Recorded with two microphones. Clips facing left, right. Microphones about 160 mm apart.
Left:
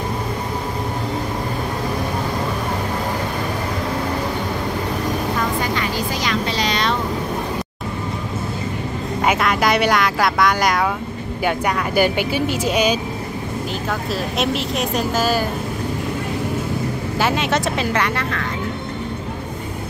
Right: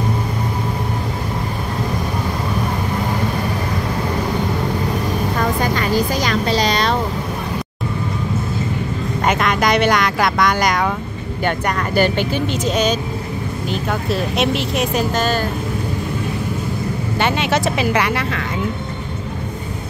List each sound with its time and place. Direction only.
5.8 s vehicle: 40° right (ahead or behind)
9.2 s music: 5° left (ahead or behind)
10.2 s speech: centre (ahead or behind)
14.1 s speech: centre (ahead or behind)
17.2 s speech: centre (ahead or behind)